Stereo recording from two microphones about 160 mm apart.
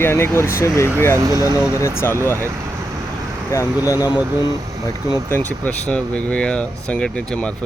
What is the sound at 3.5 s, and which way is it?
Speech, 20° left (ahead or behind).